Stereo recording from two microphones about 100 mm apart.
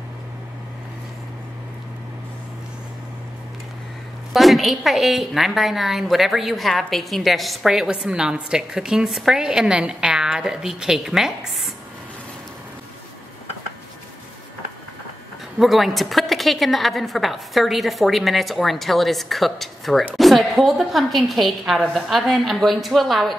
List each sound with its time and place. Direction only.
4.3 s a woman's voice: centre (ahead or behind)
15.6 s a woman's voice: centre (ahead or behind)